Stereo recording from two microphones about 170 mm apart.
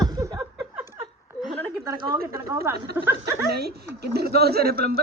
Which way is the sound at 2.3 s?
15° right (ahead or behind).